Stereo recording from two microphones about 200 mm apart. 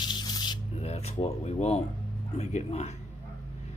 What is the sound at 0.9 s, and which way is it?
Speech, 30° left (ahead or behind).